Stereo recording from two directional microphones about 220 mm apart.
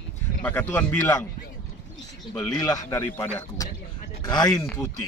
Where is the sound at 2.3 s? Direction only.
10° left (ahead or behind).